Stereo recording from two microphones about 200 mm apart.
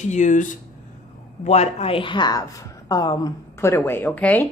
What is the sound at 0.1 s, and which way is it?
A woman's voice, 40° left (ahead or behind).